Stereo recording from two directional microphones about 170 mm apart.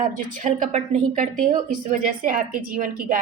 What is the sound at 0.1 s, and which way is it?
Speech, 45° right (ahead or behind).